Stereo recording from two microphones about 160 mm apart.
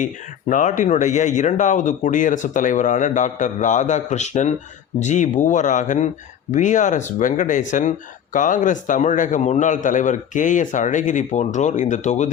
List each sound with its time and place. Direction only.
0.0 s speech: 50° left (ahead or behind)